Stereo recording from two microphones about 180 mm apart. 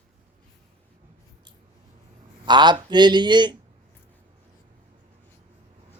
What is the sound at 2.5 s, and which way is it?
A man's voice, 25° right (ahead or behind).